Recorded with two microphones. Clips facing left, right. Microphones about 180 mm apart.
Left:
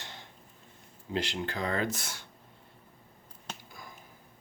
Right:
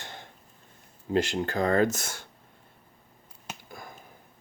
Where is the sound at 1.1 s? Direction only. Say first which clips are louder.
Right 7 dB; 45° right (ahead or behind).